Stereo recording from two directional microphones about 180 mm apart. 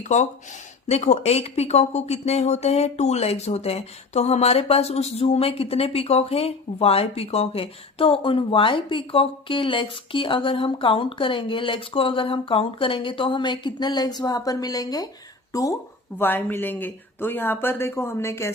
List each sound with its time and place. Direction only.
0.0 s speech: 40° left (ahead or behind); by 18.5 s 15° left (ahead or behind)